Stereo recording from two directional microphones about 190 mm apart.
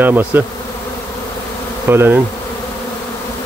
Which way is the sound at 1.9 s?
10° right (ahead or behind).